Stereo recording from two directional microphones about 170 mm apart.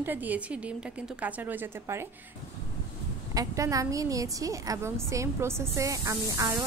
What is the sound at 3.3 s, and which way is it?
A woman's voice, 20° right (ahead or behind).